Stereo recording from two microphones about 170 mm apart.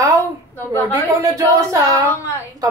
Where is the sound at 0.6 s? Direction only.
10° left (ahead or behind).